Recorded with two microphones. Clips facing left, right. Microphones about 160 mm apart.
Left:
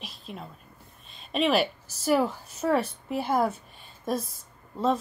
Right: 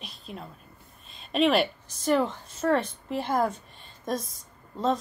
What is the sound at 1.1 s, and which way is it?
A woman's voice, centre (ahead or behind).